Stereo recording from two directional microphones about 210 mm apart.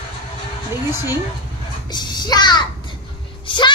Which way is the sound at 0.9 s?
10° right (ahead or behind).